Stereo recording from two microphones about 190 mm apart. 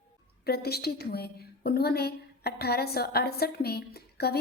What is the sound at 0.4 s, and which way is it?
A woman's voice, 55° left (ahead or behind).